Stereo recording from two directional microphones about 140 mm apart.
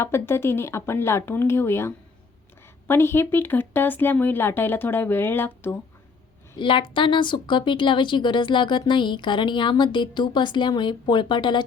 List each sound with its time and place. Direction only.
0.0 s speech: 20° left (ahead or behind)
6.6 s a woman's voice: 35° left (ahead or behind)